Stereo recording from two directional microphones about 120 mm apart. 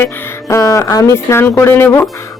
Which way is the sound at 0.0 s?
25° left (ahead or behind).